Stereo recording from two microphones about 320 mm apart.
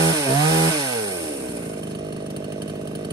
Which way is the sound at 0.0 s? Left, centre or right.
Centre.